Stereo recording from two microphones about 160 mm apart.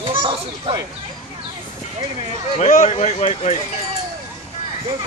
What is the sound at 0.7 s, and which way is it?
Speech, 35° right (ahead or behind).